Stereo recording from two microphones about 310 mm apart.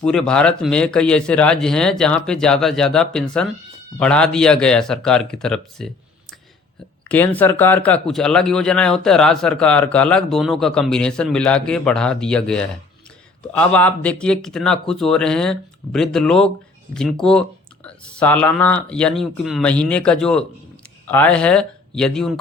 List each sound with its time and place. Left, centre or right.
0.0 s speech: centre
7.1 s speech: centre